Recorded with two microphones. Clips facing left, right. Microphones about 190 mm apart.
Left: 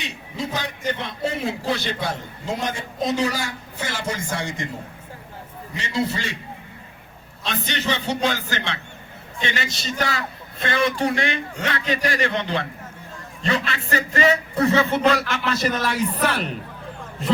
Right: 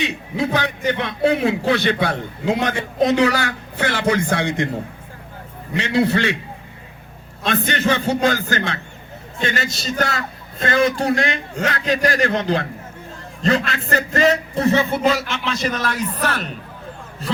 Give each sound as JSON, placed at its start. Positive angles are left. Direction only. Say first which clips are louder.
{"t": 0.0, "sound": "a man's voice", "louder": "right 8 dB", "side_deg": -60}
{"t": 5.7, "sound": "a man's voice", "louder": "right 7 dB", "side_deg": -65}
{"t": 7.4, "sound": "a man's voice", "louder": "right 6 dB", "side_deg": -55}
{"t": 14.5, "sound": "speech", "louder": "right 1 dB", "side_deg": -25}
{"t": 15.3, "sound": "a man's voice", "louder": "even", "side_deg": 5}